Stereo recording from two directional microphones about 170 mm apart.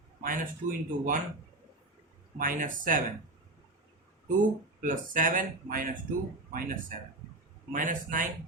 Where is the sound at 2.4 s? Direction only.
55° right (ahead or behind).